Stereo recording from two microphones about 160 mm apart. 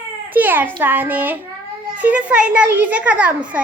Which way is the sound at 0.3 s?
10° right (ahead or behind).